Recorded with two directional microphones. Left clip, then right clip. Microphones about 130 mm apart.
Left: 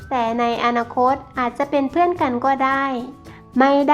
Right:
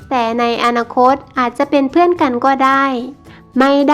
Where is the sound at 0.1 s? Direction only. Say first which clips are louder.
Right 5 dB; 35° right (ahead or behind).